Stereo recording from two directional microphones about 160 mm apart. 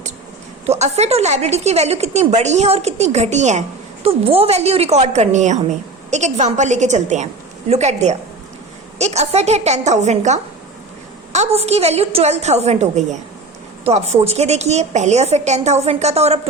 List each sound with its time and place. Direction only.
0.6 s a woman's voice: 40° right (ahead or behind)